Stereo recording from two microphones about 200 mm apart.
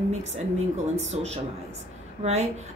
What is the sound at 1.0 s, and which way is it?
Speech, 30° right (ahead or behind).